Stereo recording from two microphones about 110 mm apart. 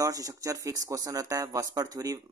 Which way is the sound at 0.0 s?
30° right (ahead or behind).